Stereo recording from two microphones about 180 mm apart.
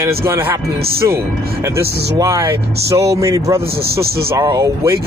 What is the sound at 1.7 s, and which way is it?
Speech, 15° right (ahead or behind).